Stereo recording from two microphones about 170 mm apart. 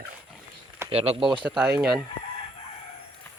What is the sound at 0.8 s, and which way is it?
Speech, 35° right (ahead or behind).